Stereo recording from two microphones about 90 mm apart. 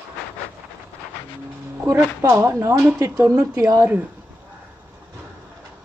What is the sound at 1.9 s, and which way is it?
Speech, 30° right (ahead or behind).